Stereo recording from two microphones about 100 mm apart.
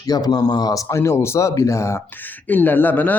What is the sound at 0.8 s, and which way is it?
Speech, 30° left (ahead or behind).